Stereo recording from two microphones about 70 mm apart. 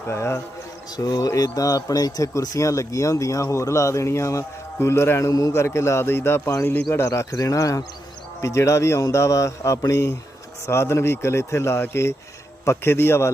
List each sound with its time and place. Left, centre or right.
0.1 s speech: left
0.9 s a man's voice: left
5.3 s a man's voice: left
5.5 s speech: left
6.5 s a man's voice: left
10.7 s speech: left